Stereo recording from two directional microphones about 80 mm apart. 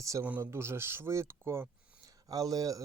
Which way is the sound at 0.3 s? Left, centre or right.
Right.